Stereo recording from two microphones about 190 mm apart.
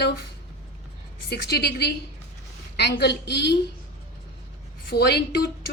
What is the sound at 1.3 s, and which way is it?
A woman's voice, 60° left (ahead or behind).